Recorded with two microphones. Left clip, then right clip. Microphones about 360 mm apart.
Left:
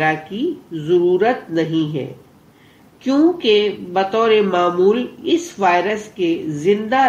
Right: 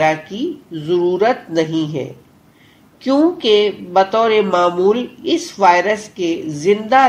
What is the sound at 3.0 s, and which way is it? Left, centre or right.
A woman's voice, centre.